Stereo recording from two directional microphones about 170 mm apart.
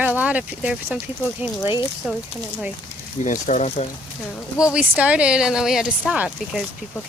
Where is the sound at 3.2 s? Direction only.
45° left (ahead or behind).